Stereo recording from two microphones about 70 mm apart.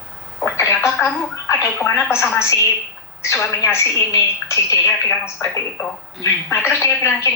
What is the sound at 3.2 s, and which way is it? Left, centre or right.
A woman's voice, left.